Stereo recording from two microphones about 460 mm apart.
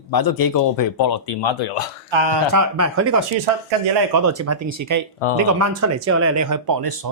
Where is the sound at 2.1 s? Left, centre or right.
Right.